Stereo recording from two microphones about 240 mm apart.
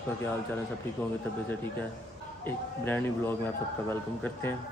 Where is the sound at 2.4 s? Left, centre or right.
Centre.